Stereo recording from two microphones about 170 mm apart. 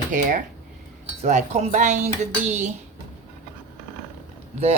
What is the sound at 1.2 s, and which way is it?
Speech, 45° right (ahead or behind).